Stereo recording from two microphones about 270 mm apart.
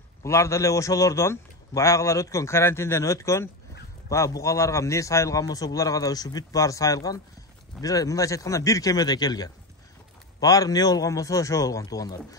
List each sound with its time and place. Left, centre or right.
0.2 s a man's voice: centre